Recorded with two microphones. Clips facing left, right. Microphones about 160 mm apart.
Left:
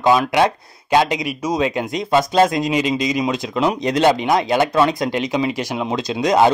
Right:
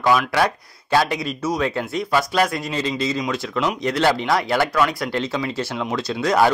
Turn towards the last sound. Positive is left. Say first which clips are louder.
# left 3 dB
turn(degrees=20)  # may be behind; listen again after turning